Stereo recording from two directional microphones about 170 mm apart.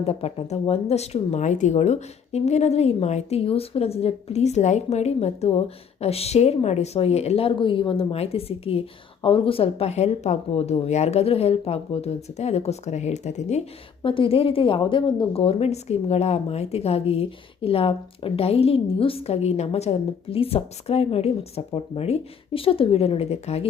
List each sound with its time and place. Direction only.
0.0 s a woman's voice: 35° left (ahead or behind)
14.0 s a woman's voice: 30° left (ahead or behind)